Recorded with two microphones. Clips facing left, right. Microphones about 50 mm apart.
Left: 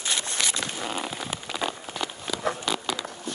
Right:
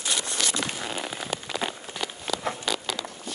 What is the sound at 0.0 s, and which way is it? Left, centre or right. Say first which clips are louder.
Zipper: even; left.